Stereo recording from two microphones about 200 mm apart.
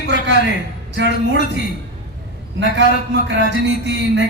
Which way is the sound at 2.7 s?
60° right (ahead or behind).